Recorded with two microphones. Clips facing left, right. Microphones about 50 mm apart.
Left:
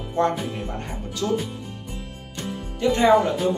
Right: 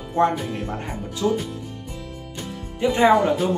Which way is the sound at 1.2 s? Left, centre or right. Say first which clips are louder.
Right 2 dB; centre.